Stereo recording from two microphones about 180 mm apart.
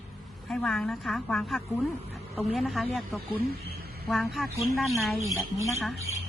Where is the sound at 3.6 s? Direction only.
60° right (ahead or behind).